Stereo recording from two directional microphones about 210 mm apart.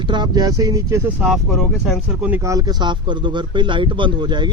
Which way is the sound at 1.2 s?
Centre (ahead or behind).